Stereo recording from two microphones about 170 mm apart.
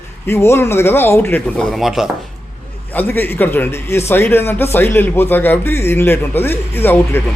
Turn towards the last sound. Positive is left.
turn(degrees=10)  # may be behind; listen again after turning